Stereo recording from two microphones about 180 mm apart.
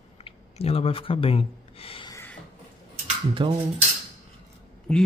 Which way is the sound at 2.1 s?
10° left (ahead or behind).